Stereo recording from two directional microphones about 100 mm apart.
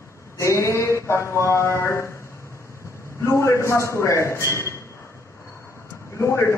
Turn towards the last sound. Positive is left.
turn(degrees=25)  # may be behind; listen again after turning